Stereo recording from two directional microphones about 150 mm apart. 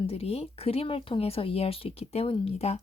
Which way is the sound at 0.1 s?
40° left (ahead or behind).